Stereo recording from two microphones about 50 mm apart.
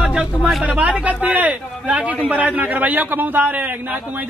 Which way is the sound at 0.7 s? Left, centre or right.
Right.